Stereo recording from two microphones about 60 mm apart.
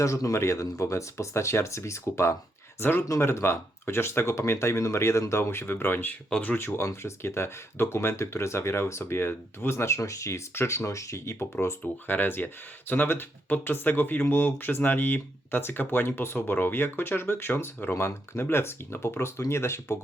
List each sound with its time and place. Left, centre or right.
0.0 s speech: left
6.7 s speech: left
12.0 s speech: left
17.9 s speech: left